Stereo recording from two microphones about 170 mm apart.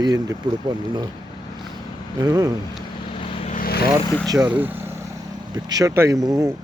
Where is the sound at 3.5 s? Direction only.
55° left (ahead or behind).